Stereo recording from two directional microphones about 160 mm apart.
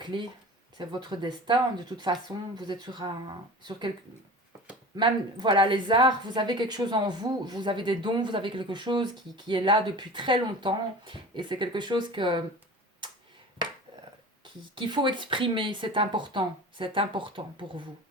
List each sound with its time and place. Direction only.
0.0 s a woman's voice: 30° right (ahead or behind)
4.9 s a woman's voice: 30° right (ahead or behind)
14.4 s speech: 30° right (ahead or behind)